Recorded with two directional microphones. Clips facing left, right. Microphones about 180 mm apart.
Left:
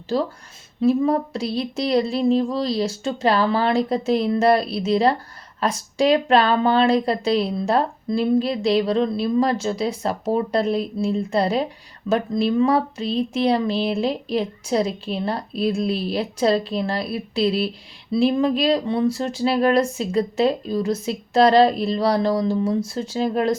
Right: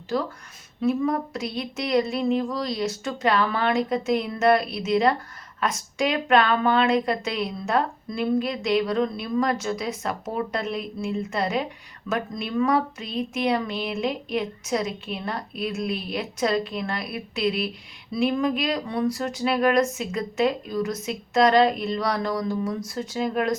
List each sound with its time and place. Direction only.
0.1 s speech: 30° left (ahead or behind)